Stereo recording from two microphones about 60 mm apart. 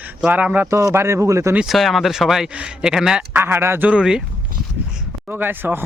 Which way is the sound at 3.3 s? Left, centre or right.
Right.